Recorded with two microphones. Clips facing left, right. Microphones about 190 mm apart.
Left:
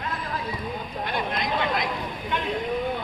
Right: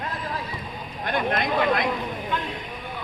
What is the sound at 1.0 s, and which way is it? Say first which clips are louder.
Vehicle: right 5 dB; 50° right (ahead or behind).